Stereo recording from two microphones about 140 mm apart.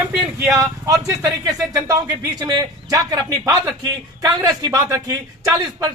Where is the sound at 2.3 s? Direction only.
30° right (ahead or behind).